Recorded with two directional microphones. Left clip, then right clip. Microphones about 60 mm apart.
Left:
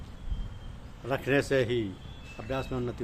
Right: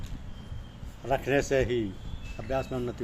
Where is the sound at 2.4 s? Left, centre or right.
Left.